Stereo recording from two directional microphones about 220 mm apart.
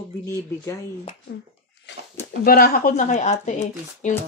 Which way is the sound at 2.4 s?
45° left (ahead or behind).